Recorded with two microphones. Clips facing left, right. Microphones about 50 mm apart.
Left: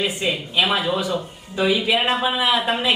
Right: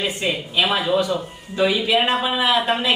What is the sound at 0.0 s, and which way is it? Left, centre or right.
Speech, centre.